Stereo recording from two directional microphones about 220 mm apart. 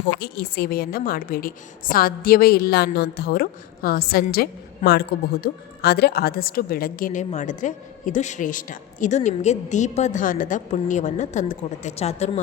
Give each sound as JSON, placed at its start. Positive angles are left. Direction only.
{"t": 0.2, "sound": "a woman's voice", "side_deg": 45}